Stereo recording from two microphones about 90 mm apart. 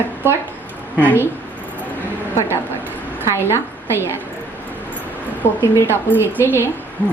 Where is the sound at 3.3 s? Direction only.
30° left (ahead or behind).